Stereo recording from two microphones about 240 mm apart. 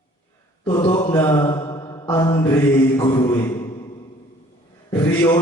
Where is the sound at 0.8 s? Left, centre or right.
Centre.